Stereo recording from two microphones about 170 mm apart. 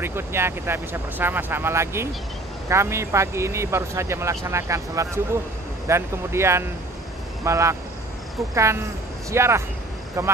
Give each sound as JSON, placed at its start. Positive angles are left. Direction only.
{"t": 0.0, "sound": "speech", "side_deg": -15}